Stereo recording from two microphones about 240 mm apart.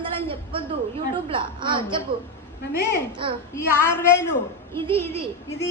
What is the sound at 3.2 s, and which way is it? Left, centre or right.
Speech, right.